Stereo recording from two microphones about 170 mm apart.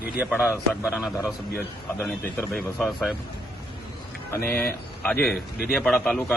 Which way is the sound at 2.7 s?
Centre (ahead or behind).